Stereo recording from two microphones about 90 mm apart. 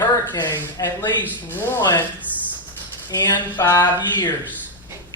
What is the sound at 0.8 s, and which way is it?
Speech, 40° left (ahead or behind).